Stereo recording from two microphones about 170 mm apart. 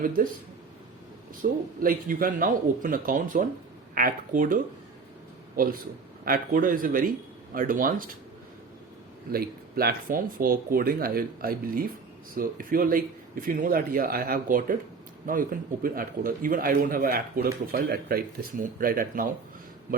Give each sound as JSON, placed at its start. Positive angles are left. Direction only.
{"t": 1.4, "sound": "a man's voice", "side_deg": -55}
{"t": 9.3, "sound": "a man's voice", "side_deg": -60}